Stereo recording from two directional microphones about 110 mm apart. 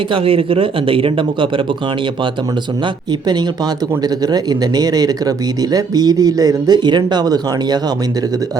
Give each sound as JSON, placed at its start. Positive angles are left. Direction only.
{"t": 0.1, "sound": "speech", "side_deg": -60}
{"t": 2.8, "sound": "speech", "side_deg": -40}